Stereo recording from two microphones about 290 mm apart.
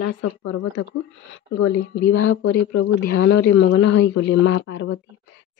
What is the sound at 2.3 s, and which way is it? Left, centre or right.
Speech, left.